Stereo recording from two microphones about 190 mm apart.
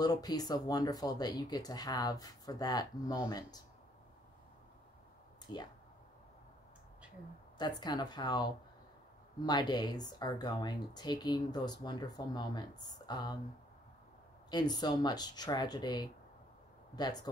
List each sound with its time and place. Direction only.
0.0 s speech: 20° left (ahead or behind)
7.5 s speech: 20° left (ahead or behind)
14.5 s speech: 20° left (ahead or behind)